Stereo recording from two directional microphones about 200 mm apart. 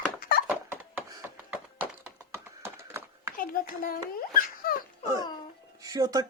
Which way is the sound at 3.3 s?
45° left (ahead or behind).